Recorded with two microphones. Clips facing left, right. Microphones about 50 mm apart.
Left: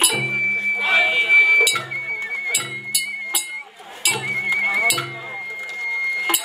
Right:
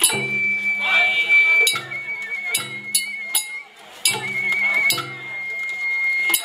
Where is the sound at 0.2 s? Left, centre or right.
Centre.